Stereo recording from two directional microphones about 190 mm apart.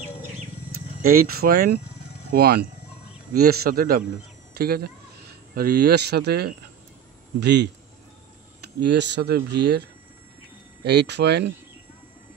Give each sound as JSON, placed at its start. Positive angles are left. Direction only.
{"t": 1.0, "sound": "speech", "side_deg": -50}
{"t": 8.7, "sound": "speech", "side_deg": -65}